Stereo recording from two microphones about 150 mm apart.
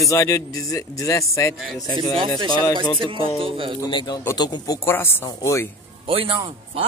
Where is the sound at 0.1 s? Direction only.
20° left (ahead or behind).